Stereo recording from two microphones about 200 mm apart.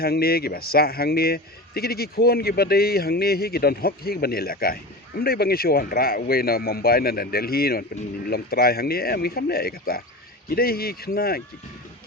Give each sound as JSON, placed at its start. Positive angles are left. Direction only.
{"t": 0.0, "sound": "a man's voice", "side_deg": 50}